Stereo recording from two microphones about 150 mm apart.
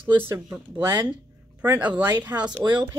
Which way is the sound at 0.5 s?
20° right (ahead or behind).